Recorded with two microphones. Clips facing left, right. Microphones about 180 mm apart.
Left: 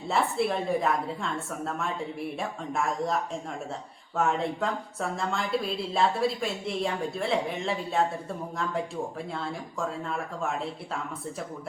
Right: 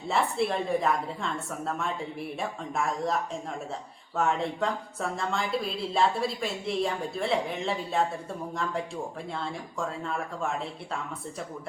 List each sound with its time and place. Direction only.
0.1 s speech: centre (ahead or behind)
4.2 s speech: centre (ahead or behind)
9.3 s speech: centre (ahead or behind)